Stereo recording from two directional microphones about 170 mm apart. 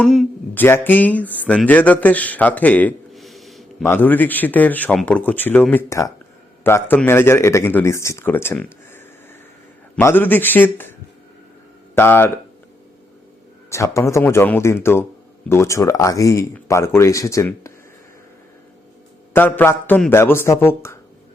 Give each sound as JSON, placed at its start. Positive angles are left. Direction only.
{"t": 0.0, "sound": "a man's voice", "side_deg": 0}
{"t": 3.8, "sound": "a man's voice", "side_deg": 10}
{"t": 11.9, "sound": "a man's voice", "side_deg": 10}
{"t": 13.7, "sound": "a man's voice", "side_deg": 15}
{"t": 19.3, "sound": "a man's voice", "side_deg": 10}